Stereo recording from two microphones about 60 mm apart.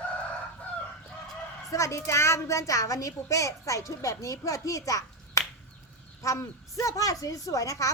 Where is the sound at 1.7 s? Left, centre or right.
Left.